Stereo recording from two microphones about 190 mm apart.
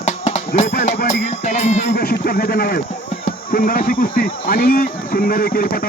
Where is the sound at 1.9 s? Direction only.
50° left (ahead or behind).